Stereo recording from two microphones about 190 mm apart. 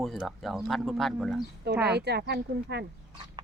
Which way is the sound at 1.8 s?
60° right (ahead or behind).